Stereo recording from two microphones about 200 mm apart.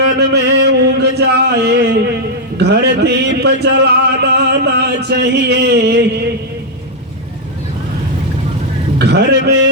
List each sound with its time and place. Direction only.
0.0 s music: 55° right (ahead or behind)
1.2 s a sound: 55° right (ahead or behind)
9.0 s a man's voice: 55° right (ahead or behind)